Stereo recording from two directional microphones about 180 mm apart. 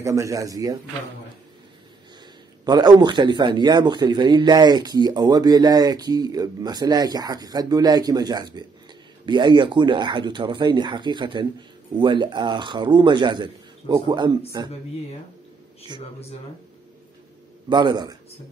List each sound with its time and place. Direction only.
0.0 s speech: 15° right (ahead or behind)
2.6 s speech: 25° right (ahead or behind)
17.6 s speech: 25° right (ahead or behind)